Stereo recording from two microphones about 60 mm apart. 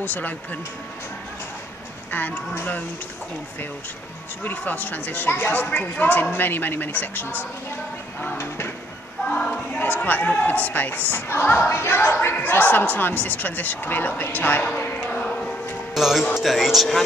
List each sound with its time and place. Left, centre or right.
0.0 s speech: left
2.0 s speech: left
4.5 s speech: left
8.4 s speech: left
9.5 s speech: left
15.9 s speech: centre